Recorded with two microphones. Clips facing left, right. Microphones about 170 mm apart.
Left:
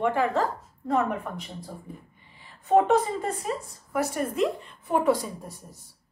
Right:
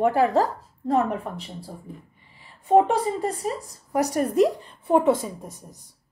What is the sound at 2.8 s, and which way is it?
A woman's voice, 35° right (ahead or behind).